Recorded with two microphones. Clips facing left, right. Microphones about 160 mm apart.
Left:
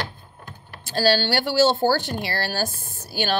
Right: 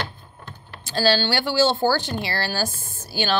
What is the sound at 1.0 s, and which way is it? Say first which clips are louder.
Speech: even; 50° left (ahead or behind).